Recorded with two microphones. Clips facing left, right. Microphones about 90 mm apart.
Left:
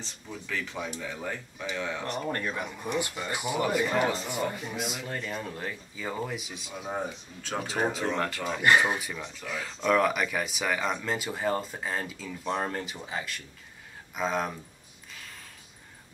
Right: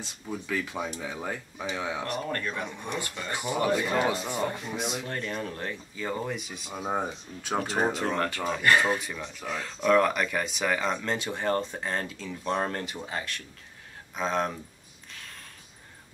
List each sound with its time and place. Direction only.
0.0 s speech: 10° right (ahead or behind)
2.0 s speech: 20° left (ahead or behind)
2.5 s speech: 5° left (ahead or behind)
3.0 s speech: 15° left (ahead or behind)
4.0 s speech: 15° right (ahead or behind)
4.3 s speech: centre (ahead or behind)
6.7 s speech: 30° right (ahead or behind)
8.2 s speech: centre (ahead or behind)
8.5 s speech: 15° left (ahead or behind)
9.4 s speech: 20° right (ahead or behind)
9.8 s speech: 5° left (ahead or behind)